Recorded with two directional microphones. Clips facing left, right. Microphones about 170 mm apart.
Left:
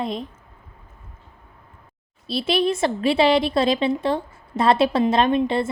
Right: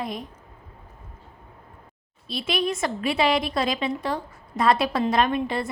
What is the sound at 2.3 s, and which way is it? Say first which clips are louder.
A woman's voice: left 5 dB; 35° left (ahead or behind).